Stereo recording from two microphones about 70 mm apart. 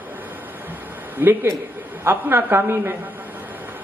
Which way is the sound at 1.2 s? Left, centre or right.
Right.